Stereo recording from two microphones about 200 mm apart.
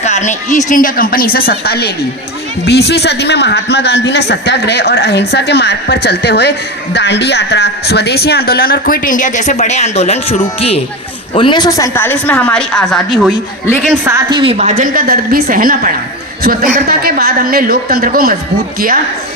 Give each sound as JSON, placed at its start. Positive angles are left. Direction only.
{"t": 0.0, "sound": "a man's voice", "side_deg": 35}